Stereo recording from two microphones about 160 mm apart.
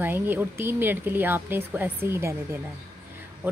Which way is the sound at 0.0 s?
15° right (ahead or behind).